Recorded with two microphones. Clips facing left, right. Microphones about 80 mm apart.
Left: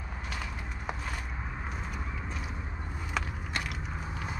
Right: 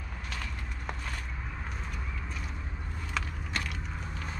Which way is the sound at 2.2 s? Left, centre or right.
Centre.